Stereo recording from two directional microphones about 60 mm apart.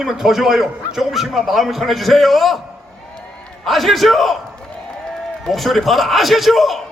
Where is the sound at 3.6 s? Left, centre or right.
Centre.